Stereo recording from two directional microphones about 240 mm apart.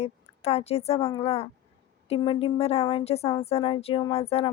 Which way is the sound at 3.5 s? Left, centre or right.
Left.